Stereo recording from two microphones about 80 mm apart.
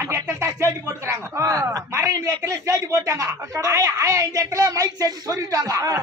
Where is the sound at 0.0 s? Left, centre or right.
Right.